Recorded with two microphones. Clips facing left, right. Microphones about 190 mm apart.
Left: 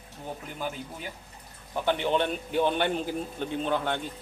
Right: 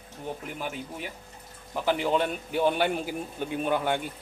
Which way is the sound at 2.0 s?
5° right (ahead or behind).